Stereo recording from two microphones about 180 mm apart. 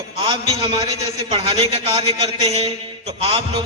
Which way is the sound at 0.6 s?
25° right (ahead or behind).